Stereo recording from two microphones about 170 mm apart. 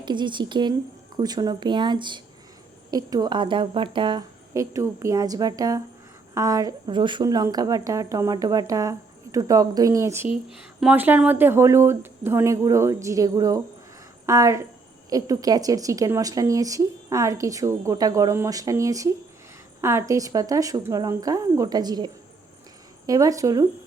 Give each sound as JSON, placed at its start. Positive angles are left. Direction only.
{"t": 0.0, "sound": "a woman's voice", "side_deg": -25}